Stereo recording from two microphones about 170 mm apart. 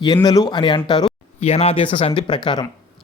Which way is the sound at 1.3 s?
35° left (ahead or behind).